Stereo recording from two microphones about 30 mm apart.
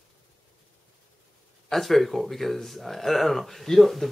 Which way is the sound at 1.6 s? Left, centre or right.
Centre.